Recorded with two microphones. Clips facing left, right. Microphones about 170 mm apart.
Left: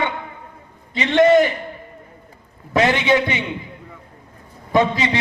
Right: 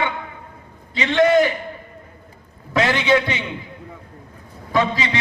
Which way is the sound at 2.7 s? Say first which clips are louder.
Left 1 dB; 20° left (ahead or behind).